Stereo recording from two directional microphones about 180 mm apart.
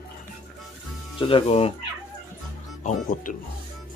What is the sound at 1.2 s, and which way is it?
Speech, 30° left (ahead or behind).